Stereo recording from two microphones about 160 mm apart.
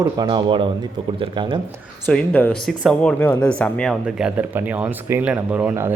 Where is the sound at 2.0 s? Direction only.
10° left (ahead or behind).